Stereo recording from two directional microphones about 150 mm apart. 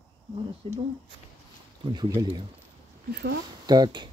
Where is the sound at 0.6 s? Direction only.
40° right (ahead or behind).